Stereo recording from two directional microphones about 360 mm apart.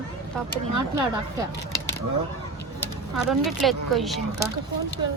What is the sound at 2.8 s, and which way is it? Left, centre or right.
Speech, centre.